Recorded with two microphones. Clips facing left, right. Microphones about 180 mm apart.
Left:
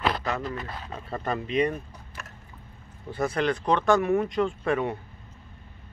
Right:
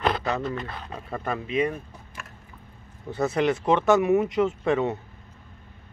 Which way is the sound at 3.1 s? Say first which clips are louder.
Right 3 dB; 20° right (ahead or behind).